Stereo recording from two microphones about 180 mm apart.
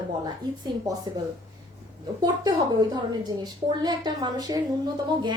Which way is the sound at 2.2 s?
25° right (ahead or behind).